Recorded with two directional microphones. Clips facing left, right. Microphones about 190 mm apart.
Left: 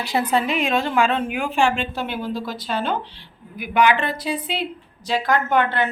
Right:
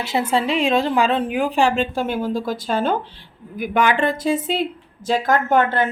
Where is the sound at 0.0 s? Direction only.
25° right (ahead or behind).